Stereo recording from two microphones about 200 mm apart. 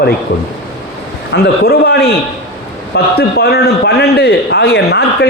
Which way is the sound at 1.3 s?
50° left (ahead or behind).